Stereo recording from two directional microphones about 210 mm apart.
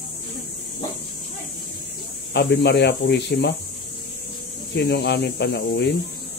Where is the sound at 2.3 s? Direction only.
55° left (ahead or behind).